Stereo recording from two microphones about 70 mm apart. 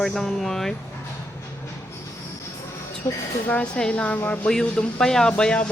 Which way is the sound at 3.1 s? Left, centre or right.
Left.